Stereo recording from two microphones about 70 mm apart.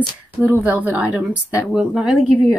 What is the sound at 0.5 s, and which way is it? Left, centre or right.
Speech, right.